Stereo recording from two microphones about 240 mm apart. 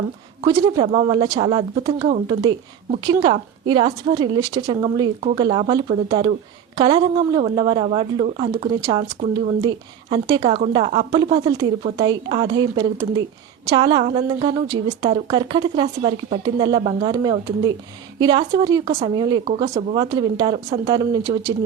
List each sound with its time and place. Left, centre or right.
0.9 s a woman's voice: right
1.1 s a woman's voice: centre